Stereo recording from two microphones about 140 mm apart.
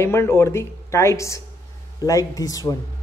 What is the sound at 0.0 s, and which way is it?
Speech, 20° left (ahead or behind).